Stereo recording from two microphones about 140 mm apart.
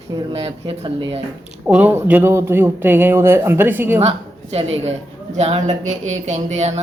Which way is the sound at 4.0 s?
45° right (ahead or behind).